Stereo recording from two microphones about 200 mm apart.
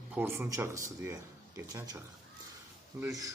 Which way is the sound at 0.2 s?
10° right (ahead or behind).